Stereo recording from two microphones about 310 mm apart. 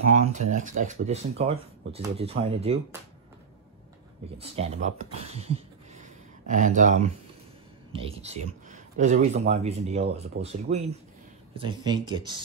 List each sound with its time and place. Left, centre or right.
0.1 s speech: right
4.4 s speech: centre